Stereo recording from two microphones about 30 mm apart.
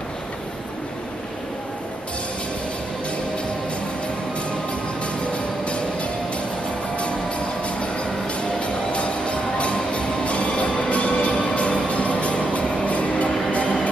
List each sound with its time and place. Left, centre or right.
5.3 s music: left